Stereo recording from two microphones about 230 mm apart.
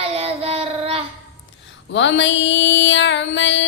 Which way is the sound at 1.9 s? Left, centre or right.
Left.